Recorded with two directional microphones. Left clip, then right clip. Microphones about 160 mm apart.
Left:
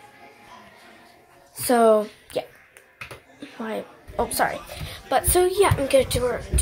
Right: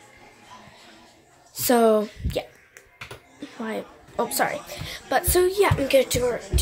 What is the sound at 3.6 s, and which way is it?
A woman's voice, 15° right (ahead or behind).